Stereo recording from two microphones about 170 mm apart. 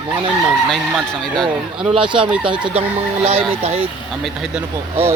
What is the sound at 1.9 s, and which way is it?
Speech, 30° right (ahead or behind).